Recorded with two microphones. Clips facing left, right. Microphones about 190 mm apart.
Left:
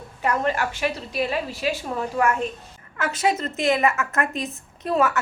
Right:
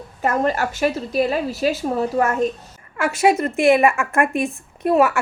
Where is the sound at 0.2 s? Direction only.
40° right (ahead or behind).